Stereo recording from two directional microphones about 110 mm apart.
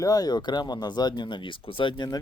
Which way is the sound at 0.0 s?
35° left (ahead or behind).